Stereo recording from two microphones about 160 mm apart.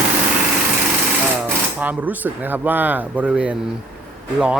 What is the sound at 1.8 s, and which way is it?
Speech, 10° right (ahead or behind).